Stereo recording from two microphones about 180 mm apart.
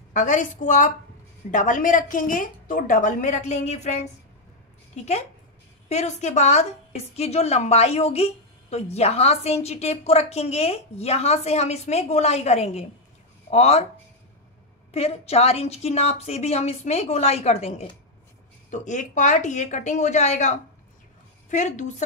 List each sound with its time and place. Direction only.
0.1 s a woman's voice: 45° left (ahead or behind)
5.9 s a woman's voice: 40° left (ahead or behind)
14.9 s a woman's voice: 35° left (ahead or behind)